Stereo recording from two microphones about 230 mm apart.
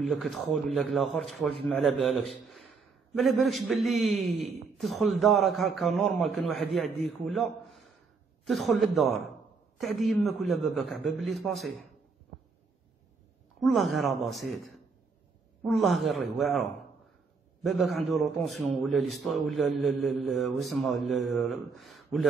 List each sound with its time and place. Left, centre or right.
0.0 s a man's voice: centre
3.2 s a man's voice: centre
13.6 s a man's voice: centre